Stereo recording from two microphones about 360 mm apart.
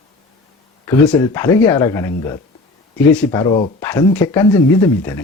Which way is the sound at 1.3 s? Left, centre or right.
Centre.